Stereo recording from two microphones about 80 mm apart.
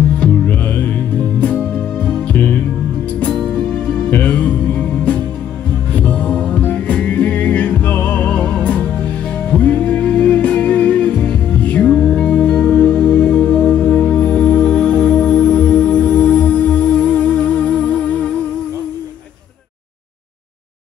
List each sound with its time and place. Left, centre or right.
0.2 s music: centre
2.3 s music: left
3.2 s music: centre
5.9 s music: centre